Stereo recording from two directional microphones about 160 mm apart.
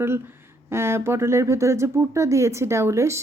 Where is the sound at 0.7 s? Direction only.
15° right (ahead or behind).